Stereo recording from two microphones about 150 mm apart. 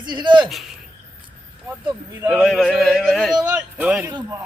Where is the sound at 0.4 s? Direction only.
Centre (ahead or behind).